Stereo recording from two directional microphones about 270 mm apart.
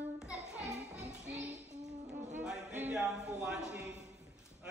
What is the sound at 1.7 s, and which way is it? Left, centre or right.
Music, right.